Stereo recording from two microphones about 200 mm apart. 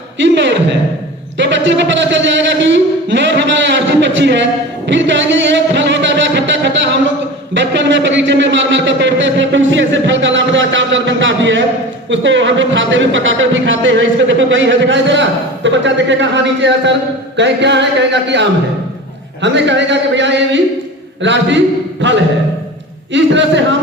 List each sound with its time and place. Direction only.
0.2 s a man's voice: 65° right (ahead or behind)
1.4 s a sound: 65° right (ahead or behind)
4.9 s music: 65° right (ahead or behind)
7.5 s a man's voice: 65° right (ahead or behind)
23.1 s a man's voice: 65° right (ahead or behind)